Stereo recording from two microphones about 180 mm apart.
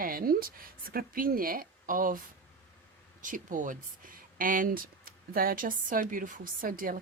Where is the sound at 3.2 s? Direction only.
45° right (ahead or behind).